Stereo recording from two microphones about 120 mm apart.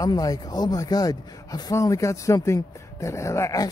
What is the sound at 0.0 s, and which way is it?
A man's voice, 30° left (ahead or behind).